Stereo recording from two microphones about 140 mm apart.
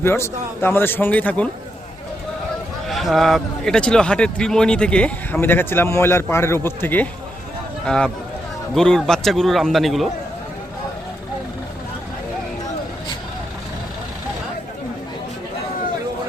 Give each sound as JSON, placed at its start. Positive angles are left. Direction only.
{"t": 0.0, "sound": "speech", "side_deg": 15}
{"t": 2.9, "sound": "a man's voice", "side_deg": 0}